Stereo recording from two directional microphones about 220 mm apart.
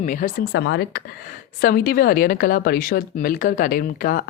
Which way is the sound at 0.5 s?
55° left (ahead or behind).